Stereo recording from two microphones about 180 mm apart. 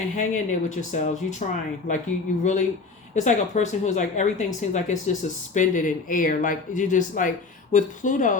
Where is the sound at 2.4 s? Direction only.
40° left (ahead or behind).